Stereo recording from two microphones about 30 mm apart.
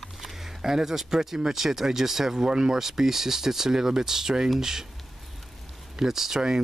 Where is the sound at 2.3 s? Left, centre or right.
Right.